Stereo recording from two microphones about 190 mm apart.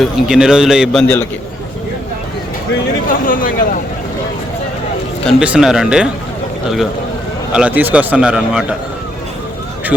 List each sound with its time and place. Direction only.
0.0 s a man's voice: centre (ahead or behind)
3.1 s speech: 45° left (ahead or behind)
5.2 s a man's voice: 5° right (ahead or behind)
7.5 s a man's voice: 5° right (ahead or behind)